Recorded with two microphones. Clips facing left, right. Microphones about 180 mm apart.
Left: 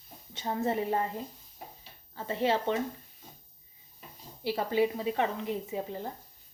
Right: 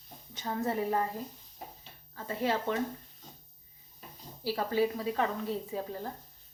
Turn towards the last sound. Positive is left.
turn(degrees=20)  # may be behind; listen again after turning